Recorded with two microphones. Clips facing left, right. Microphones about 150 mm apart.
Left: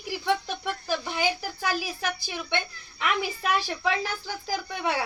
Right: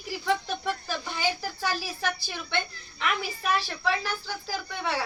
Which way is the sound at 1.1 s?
15° left (ahead or behind).